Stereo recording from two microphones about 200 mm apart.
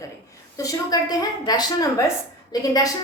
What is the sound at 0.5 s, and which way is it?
A woman's voice, 15° left (ahead or behind).